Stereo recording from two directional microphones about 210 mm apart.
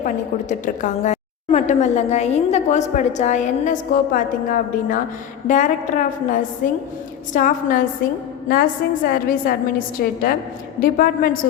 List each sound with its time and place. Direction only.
0.0 s a woman's voice: 40° left (ahead or behind)